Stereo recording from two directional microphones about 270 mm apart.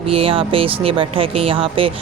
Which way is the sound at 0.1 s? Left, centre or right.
Right.